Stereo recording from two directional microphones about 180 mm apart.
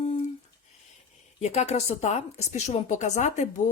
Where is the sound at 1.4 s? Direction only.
40° left (ahead or behind).